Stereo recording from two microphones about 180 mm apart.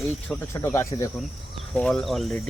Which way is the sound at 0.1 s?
15° left (ahead or behind).